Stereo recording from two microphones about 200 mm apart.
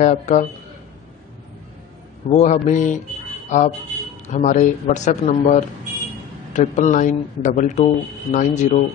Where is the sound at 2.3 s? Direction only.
35° left (ahead or behind).